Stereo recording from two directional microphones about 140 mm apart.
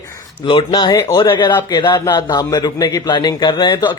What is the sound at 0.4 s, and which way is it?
A man's voice, 35° left (ahead or behind).